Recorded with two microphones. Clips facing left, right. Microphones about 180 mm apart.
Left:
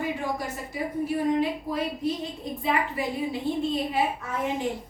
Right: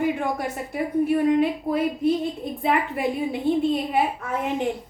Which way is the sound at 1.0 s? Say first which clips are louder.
Right 4 dB; 60° right (ahead or behind).